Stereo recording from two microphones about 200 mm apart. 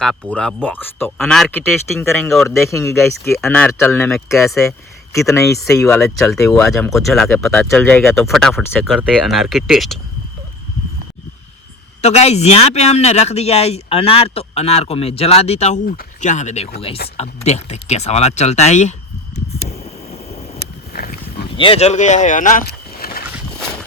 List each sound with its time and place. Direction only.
0.0 s speech: 5° left (ahead or behind)
2.5 s speech: 15° left (ahead or behind)
5.1 s speech: 15° left (ahead or behind)
6.0 s speech: centre (ahead or behind)
12.0 s speech: 30° left (ahead or behind)
19.5 s a sound: 30° left (ahead or behind)
20.9 s a sound: 50° left (ahead or behind)
21.5 s speech: 25° left (ahead or behind); by 23.2 s 50° left (ahead or behind)